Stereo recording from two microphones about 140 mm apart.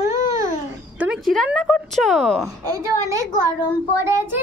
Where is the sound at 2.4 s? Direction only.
25° right (ahead or behind).